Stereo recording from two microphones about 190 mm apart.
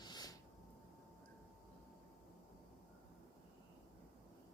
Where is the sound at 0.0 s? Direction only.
20° left (ahead or behind).